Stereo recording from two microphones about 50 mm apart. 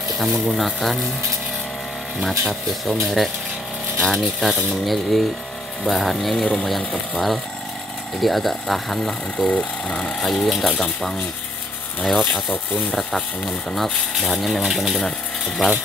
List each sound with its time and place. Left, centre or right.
0.2 s speech: centre
2.2 s speech: centre
6.3 s speech: centre
8.2 s speech: centre
9.5 s speech: left
10.2 s speech: centre
12.0 s speech: centre
14.1 s speech: centre
15.0 s a sound: centre